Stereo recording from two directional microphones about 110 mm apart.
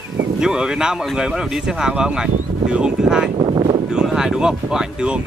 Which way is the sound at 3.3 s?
50° right (ahead or behind).